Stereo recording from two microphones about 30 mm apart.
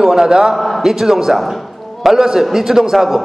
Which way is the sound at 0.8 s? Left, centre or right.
Centre.